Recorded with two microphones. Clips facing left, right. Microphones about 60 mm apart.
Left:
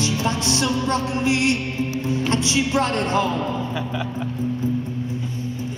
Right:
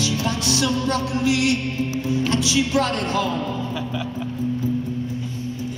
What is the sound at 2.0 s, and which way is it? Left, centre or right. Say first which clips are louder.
Speech: even; left.